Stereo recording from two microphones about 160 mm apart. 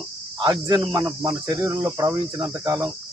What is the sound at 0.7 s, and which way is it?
Cricket, 25° right (ahead or behind).